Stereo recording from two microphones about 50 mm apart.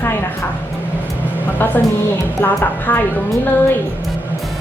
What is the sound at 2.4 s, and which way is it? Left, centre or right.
Speech, left.